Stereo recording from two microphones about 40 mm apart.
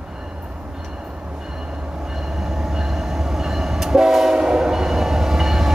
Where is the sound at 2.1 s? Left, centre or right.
Centre.